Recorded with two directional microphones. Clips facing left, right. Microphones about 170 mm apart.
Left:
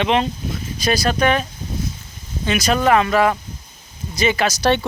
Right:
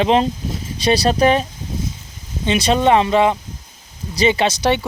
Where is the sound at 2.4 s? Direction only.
25° right (ahead or behind).